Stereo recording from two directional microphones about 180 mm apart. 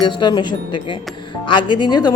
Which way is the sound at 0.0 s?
25° left (ahead or behind).